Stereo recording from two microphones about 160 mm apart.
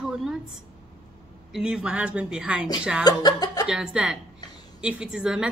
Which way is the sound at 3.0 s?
25° left (ahead or behind).